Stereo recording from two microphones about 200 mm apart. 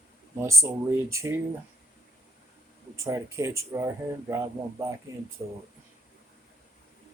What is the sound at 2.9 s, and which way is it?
Speech, 15° right (ahead or behind).